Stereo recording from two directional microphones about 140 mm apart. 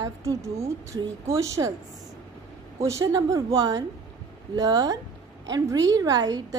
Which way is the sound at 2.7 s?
20° right (ahead or behind).